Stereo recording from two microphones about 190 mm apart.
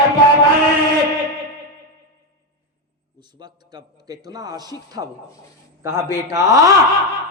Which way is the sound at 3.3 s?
20° right (ahead or behind).